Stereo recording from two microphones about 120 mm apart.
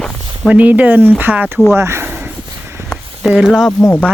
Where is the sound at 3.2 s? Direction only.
5° right (ahead or behind).